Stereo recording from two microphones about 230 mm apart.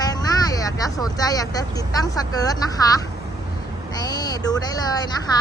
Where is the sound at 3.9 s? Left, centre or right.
Centre.